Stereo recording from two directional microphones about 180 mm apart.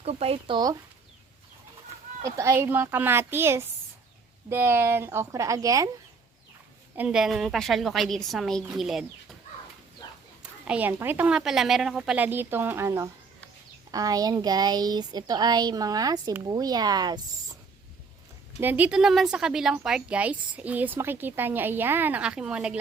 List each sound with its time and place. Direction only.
0.0 s speech: 35° right (ahead or behind)
2.2 s speech: 15° right (ahead or behind)
6.9 s a woman's voice: 5° right (ahead or behind)
10.7 s speech: 10° right (ahead or behind)
18.6 s speech: 10° right (ahead or behind)